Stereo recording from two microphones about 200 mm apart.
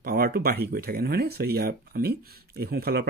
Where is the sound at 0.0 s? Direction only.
50° right (ahead or behind).